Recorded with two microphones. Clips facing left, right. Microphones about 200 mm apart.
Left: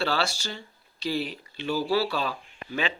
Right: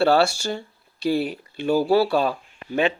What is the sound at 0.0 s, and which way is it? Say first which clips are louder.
Speech: right 10 dB; 55° right (ahead or behind).